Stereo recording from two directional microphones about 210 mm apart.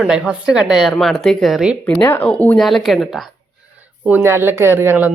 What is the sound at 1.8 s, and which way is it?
Speech, 10° left (ahead or behind).